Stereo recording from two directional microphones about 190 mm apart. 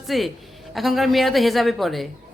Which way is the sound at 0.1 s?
Centre (ahead or behind).